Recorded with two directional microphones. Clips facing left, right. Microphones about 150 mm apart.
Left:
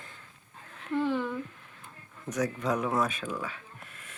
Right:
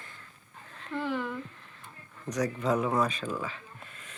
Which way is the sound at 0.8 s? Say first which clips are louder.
Left 4 dB; 5° left (ahead or behind).